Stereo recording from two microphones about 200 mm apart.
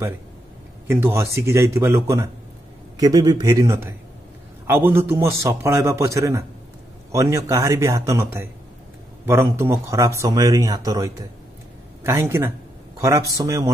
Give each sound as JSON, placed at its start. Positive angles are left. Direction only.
{"t": 0.8, "sound": "speech", "side_deg": -10}